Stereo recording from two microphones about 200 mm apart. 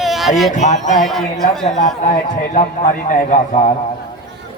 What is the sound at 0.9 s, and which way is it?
Speech, centre (ahead or behind).